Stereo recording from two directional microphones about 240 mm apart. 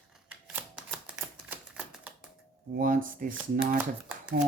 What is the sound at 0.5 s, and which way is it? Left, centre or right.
Typewriter, centre.